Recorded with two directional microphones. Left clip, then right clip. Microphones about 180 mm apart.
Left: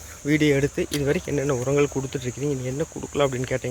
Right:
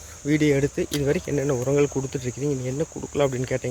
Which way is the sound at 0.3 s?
5° right (ahead or behind).